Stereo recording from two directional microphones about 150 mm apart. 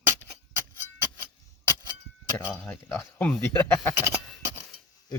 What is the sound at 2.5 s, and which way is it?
Speech, 5° left (ahead or behind).